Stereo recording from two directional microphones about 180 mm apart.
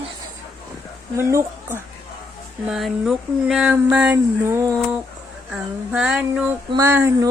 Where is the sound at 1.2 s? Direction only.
15° right (ahead or behind).